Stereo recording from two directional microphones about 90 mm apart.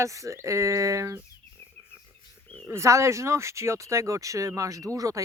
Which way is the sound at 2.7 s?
35° right (ahead or behind).